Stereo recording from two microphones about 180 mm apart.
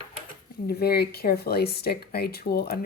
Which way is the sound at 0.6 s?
60° left (ahead or behind).